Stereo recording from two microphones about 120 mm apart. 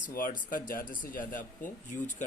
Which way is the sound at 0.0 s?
90° left.